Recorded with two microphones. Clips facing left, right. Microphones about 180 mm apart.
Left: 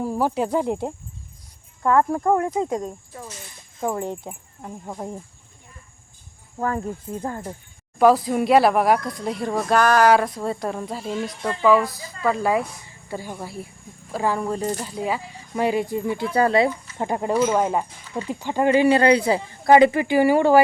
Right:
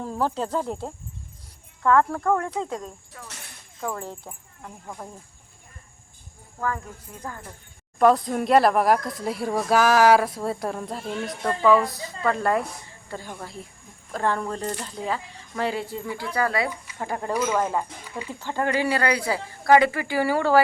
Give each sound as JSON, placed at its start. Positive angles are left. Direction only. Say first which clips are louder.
{"t": 0.0, "sound": "speech", "louder": "left 4 dB", "side_deg": 10}
{"t": 6.6, "sound": "speech", "louder": "left 5 dB", "side_deg": 30}
{"t": 7.9, "sound": "speech", "louder": "left 3 dB", "side_deg": 5}